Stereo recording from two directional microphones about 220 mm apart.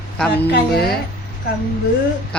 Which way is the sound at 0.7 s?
45° left (ahead or behind).